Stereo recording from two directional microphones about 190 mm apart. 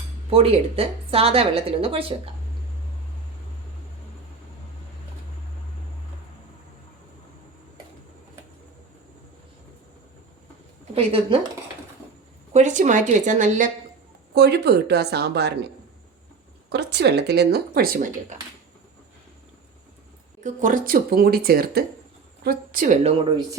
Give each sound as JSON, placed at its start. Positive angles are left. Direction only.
{"t": 0.3, "sound": "a woman's voice", "side_deg": -30}
{"t": 10.9, "sound": "a woman's voice", "side_deg": -30}
{"t": 12.5, "sound": "speech", "side_deg": -40}
{"t": 14.3, "sound": "speech", "side_deg": -60}
{"t": 16.6, "sound": "speech", "side_deg": -60}
{"t": 20.4, "sound": "speech", "side_deg": -45}